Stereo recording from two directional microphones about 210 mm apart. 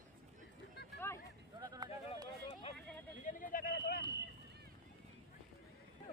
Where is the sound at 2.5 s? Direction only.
30° left (ahead or behind).